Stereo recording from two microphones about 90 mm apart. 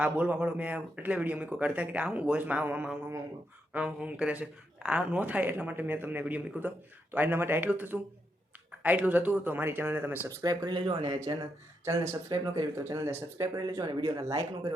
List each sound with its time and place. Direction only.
0.0 s speech: 15° right (ahead or behind)
10.2 s speech: 45° right (ahead or behind)
10.7 s speech: 65° right (ahead or behind); by 14.7 s 40° right (ahead or behind)